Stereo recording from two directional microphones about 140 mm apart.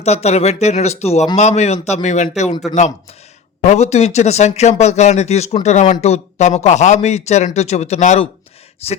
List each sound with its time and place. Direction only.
0.0 s a man's voice: 50° left (ahead or behind)
3.6 s a man's voice: 55° left (ahead or behind)